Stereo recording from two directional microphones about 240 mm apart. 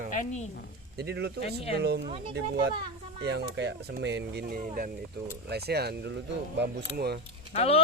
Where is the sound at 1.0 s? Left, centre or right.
Right.